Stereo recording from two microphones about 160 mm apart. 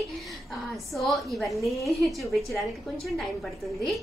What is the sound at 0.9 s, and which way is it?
A woman's voice, centre (ahead or behind).